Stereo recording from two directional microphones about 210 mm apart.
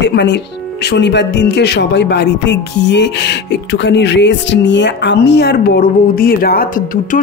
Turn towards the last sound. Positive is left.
turn(degrees=45)  # may be behind; listen again after turning